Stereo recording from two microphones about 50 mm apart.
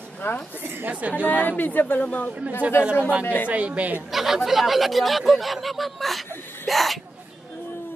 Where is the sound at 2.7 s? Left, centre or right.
Left.